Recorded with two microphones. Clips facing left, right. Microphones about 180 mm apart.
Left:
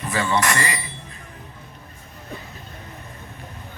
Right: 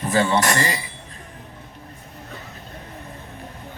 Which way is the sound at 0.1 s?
30° right (ahead or behind).